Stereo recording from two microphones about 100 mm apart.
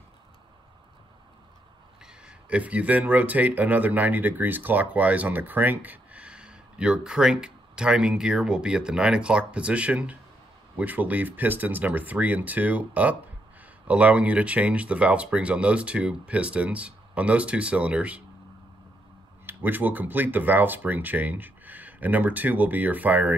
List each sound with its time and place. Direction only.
2.2 s speech: 15° right (ahead or behind)
19.4 s speech: 20° right (ahead or behind)